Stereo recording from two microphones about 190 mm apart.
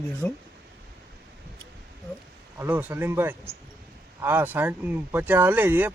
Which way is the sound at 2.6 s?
10° right (ahead or behind).